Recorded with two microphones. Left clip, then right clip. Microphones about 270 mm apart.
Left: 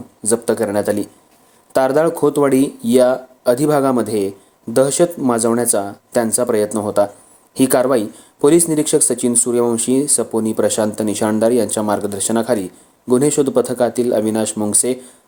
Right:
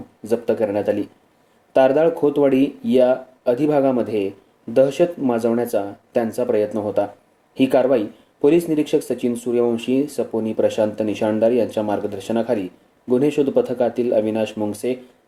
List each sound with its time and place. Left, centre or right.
0.2 s speech: left